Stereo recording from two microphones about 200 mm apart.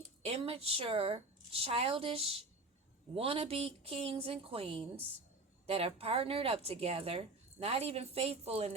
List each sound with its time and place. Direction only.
0.3 s a woman's voice: 30° right (ahead or behind)